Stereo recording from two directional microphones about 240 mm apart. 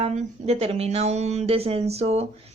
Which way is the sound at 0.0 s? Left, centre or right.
Right.